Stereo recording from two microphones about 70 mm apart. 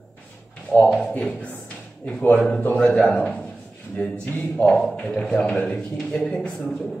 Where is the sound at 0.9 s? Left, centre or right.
Centre.